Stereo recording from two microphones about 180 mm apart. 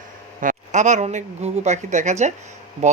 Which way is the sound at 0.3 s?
45° right (ahead or behind).